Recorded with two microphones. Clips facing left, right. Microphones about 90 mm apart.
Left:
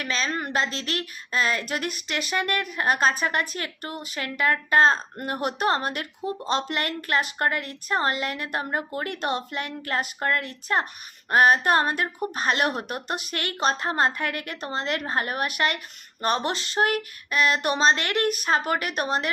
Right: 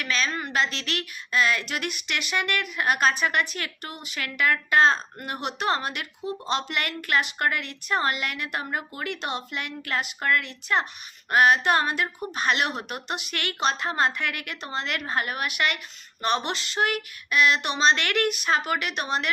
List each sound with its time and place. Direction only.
0.0 s a woman's voice: 30° left (ahead or behind)